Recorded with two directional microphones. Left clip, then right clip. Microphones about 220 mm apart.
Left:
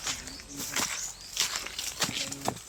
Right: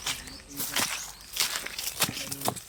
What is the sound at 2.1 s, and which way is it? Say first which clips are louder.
Horse: even; 30° right (ahead or behind).